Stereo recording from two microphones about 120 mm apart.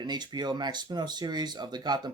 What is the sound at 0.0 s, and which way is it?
Speech, 35° right (ahead or behind).